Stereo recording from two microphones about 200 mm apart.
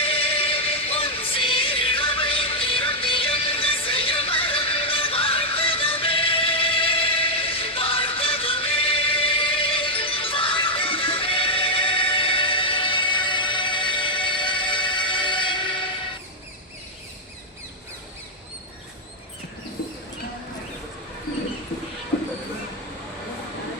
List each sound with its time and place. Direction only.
0.0 s music: 30° left (ahead or behind)